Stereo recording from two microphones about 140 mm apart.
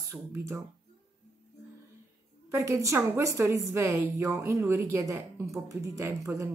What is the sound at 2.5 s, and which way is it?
A woman's voice, 20° right (ahead or behind).